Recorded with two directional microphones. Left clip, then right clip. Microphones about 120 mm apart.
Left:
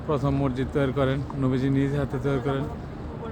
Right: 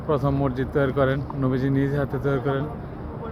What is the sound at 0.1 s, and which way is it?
Speech, 25° left (ahead or behind).